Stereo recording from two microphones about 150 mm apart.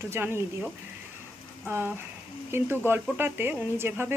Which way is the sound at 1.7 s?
15° right (ahead or behind).